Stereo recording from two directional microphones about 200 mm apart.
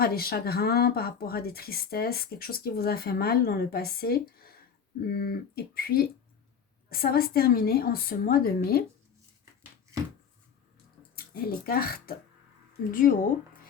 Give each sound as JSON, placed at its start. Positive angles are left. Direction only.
{"t": 0.0, "sound": "speech", "side_deg": 50}
{"t": 11.1, "sound": "speech", "side_deg": 50}